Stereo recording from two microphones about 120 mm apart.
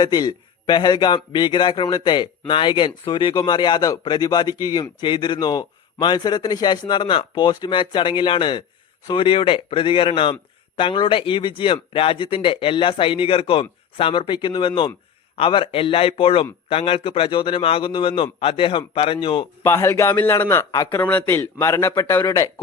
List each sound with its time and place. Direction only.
0.0 s a man's voice: 35° left (ahead or behind)
19.6 s speech: 20° left (ahead or behind)
20.7 s a man's voice: 35° left (ahead or behind)
20.9 s speech: 15° left (ahead or behind)